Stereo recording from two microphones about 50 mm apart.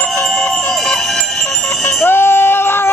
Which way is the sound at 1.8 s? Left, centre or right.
Left.